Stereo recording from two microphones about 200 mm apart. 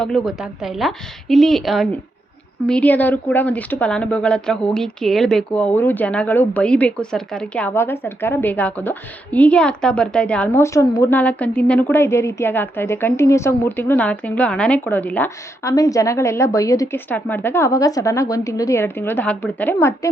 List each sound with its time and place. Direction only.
0.0 s a woman's voice: centre (ahead or behind)